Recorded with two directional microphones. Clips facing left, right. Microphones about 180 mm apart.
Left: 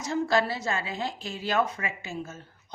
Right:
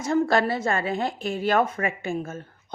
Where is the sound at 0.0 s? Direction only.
55° right (ahead or behind).